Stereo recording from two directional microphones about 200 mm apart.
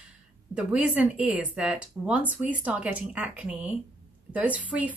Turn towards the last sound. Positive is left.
turn(degrees=-5)  # may be behind; listen again after turning